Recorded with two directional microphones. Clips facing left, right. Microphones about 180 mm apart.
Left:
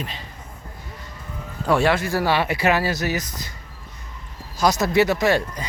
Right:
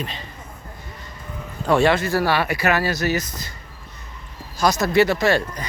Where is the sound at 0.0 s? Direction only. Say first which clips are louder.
Right 2 dB; 10° left (ahead or behind).